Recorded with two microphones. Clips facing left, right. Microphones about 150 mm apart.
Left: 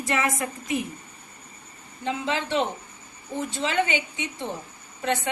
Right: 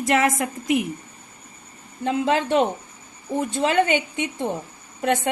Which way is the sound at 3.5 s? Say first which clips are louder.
Right 5 dB; 55° right (ahead or behind).